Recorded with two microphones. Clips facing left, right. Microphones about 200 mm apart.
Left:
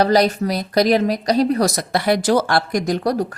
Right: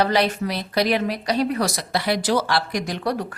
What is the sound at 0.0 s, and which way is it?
A woman's voice, 40° left (ahead or behind).